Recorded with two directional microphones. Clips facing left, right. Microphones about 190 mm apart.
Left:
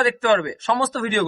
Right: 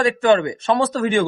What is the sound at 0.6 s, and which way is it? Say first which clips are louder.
Speech: right 4 dB; 20° right (ahead or behind).